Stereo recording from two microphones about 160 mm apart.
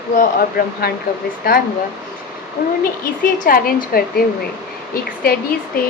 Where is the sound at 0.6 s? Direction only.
70° left (ahead or behind).